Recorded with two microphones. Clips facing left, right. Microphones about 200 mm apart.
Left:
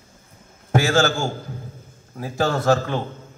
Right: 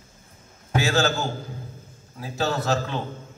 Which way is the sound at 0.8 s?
50° left (ahead or behind).